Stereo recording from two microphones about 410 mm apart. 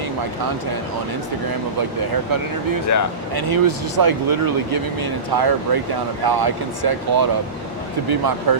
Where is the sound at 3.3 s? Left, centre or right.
Right.